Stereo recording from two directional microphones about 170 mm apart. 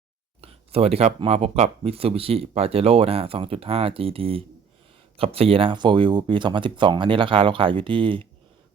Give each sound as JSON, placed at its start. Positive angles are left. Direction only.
{"t": 0.4, "sound": "speech", "side_deg": -35}